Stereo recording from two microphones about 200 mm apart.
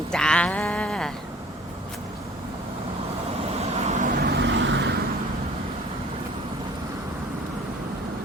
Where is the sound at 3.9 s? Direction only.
40° right (ahead or behind); by 5.0 s 60° right (ahead or behind).